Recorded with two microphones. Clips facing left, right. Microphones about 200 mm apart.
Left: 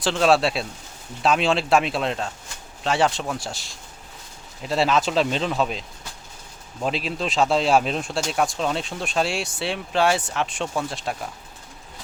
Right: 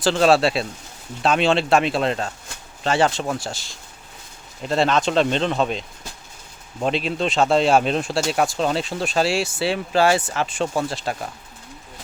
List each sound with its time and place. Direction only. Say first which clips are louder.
0.0 s speech: right 3 dB; centre (ahead or behind)
6.8 s speech: right 4 dB; centre (ahead or behind)